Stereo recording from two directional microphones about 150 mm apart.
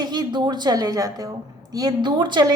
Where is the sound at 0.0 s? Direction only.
30° right (ahead or behind).